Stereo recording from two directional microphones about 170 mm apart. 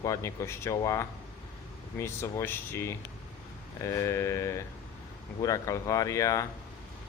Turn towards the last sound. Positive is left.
turn(degrees=20)  # may be behind; listen again after turning